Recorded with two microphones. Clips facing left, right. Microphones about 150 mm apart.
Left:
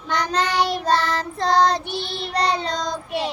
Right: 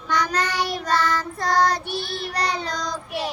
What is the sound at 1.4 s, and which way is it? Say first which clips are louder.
Child singing: left 3 dB; 25° left (ahead or behind).